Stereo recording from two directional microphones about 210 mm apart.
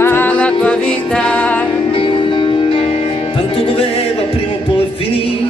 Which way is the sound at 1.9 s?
25° left (ahead or behind).